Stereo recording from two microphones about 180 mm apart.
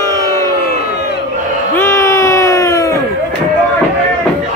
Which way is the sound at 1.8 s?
15° left (ahead or behind).